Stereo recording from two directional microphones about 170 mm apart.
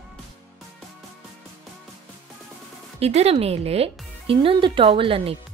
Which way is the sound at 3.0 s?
35° right (ahead or behind).